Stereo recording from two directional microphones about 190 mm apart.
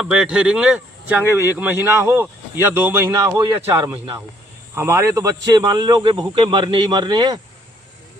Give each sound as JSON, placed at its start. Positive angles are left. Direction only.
{"t": 0.0, "sound": "speech", "side_deg": -5}